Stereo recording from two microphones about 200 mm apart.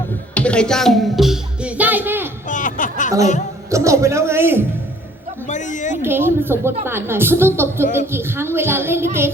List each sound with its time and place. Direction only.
0.3 s music: 5° left (ahead or behind); by 2.3 s 10° right (ahead or behind)
2.5 s a sound: 40° left (ahead or behind)
3.7 s a woman's voice: 15° right (ahead or behind)
5.5 s speech: 40° left (ahead or behind)
6.0 s a woman's voice: 10° right (ahead or behind)